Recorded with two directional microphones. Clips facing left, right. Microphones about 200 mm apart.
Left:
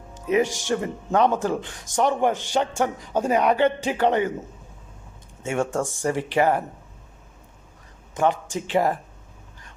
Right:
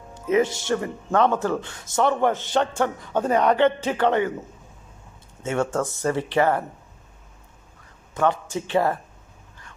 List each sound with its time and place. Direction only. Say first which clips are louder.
0.3 s speech: right 1 dB; 15° left (ahead or behind)
5.4 s speech: right 1 dB; 15° left (ahead or behind)
8.1 s a man's voice: even; 15° left (ahead or behind)